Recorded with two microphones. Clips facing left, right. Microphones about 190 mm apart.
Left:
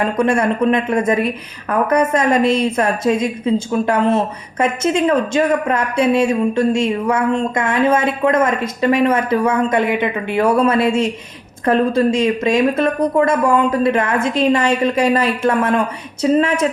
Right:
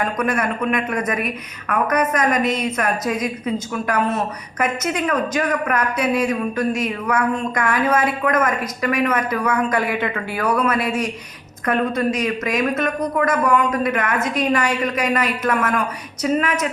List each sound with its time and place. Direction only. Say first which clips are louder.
0.0 s a woman's voice: left 5 dB; 30° left (ahead or behind)